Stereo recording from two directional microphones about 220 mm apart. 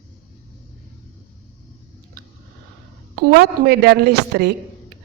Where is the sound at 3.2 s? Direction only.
45° right (ahead or behind).